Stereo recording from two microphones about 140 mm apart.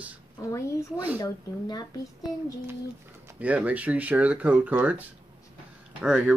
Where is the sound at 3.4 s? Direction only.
10° right (ahead or behind).